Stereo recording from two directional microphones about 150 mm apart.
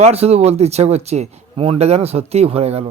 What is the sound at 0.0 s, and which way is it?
A man's voice, 45° right (ahead or behind).